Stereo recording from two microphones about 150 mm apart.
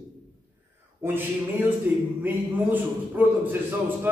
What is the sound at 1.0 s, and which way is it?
A man's voice, 15° right (ahead or behind).